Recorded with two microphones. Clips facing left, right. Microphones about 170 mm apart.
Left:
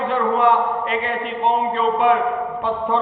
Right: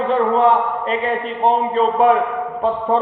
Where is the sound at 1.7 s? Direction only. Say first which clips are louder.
Right 3 dB; 35° right (ahead or behind).